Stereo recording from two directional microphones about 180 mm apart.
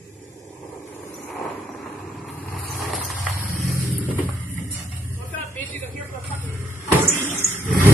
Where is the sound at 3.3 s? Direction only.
50° right (ahead or behind).